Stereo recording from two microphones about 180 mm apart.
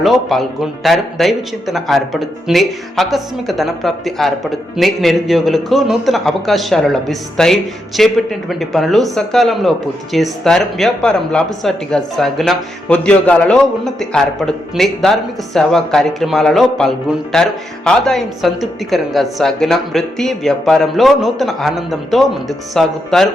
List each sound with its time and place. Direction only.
0.0 s a man's voice: centre (ahead or behind)